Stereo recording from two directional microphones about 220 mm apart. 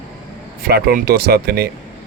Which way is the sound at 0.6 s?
45° right (ahead or behind).